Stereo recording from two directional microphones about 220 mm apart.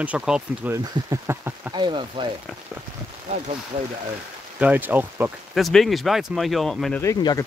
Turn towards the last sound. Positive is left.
turn(degrees=15)  # may be behind; listen again after turning